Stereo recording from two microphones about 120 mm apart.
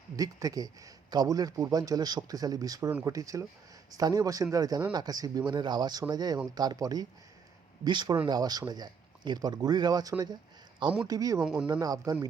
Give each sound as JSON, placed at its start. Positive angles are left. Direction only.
{"t": 0.2, "sound": "speech", "side_deg": -30}